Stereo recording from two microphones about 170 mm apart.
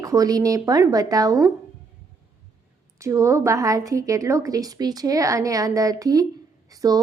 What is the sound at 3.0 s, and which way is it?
A woman's voice, 15° right (ahead or behind).